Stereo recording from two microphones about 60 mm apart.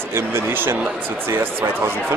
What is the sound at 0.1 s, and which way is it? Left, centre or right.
Speech, right.